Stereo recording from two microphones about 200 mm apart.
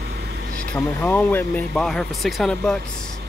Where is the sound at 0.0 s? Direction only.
55° right (ahead or behind).